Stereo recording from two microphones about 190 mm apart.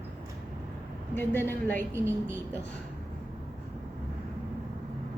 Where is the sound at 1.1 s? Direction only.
10° left (ahead or behind).